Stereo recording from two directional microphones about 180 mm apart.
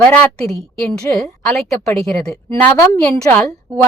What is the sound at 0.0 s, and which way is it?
A woman's voice, 10° left (ahead or behind).